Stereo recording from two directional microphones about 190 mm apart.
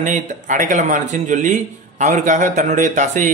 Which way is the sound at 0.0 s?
40° right (ahead or behind).